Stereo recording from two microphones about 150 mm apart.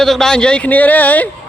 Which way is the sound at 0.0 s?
5° left (ahead or behind).